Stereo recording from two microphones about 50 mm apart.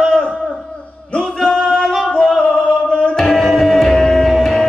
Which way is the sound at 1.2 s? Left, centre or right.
Centre.